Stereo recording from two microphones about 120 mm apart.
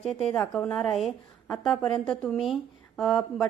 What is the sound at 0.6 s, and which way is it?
Speech, 5° left (ahead or behind).